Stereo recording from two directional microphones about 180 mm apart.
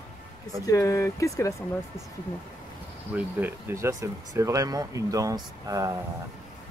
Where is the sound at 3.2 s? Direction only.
10° right (ahead or behind).